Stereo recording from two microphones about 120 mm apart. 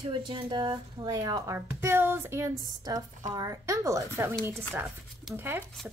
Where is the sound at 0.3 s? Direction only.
35° right (ahead or behind).